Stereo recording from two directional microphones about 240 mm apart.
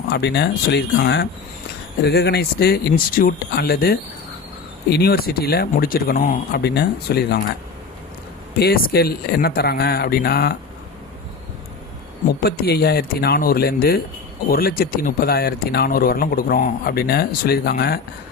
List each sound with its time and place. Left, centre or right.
0.1 s speech: left
8.5 s speech: left
12.4 s speech: left